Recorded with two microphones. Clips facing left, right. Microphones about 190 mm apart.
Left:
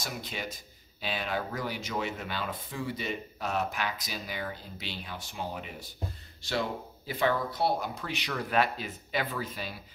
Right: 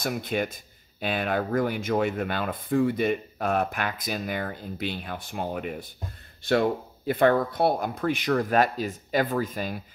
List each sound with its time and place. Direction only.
0.0 s speech: 55° right (ahead or behind)